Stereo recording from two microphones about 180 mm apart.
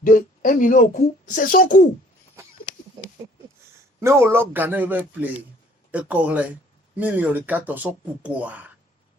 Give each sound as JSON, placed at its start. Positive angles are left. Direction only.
{"t": 0.0, "sound": "speech", "side_deg": 50}
{"t": 4.0, "sound": "speech", "side_deg": -15}